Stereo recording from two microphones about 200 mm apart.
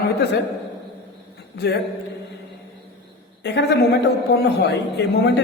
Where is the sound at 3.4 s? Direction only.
55° left (ahead or behind).